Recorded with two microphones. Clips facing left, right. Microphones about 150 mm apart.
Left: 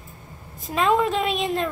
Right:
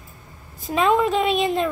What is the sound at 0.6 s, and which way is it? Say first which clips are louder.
A woman's voice: right 2 dB; centre (ahead or behind).